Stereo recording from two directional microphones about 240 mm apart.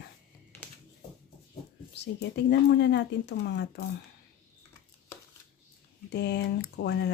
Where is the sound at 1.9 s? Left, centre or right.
Left.